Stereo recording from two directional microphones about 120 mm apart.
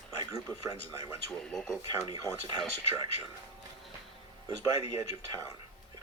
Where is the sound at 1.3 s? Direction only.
5° left (ahead or behind).